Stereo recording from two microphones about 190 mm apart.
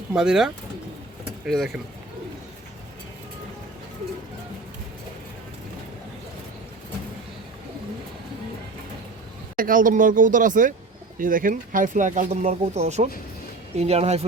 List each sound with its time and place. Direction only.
0.1 s speech: 5° right (ahead or behind)
9.6 s speech: 45° right (ahead or behind)